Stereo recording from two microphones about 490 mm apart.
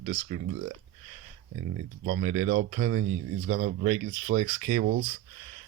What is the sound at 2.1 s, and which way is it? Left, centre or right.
Speech, centre.